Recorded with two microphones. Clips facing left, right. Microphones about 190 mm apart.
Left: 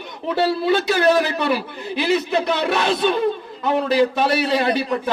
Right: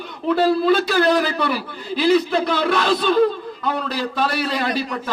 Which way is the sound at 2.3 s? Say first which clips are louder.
Even; 20° left (ahead or behind).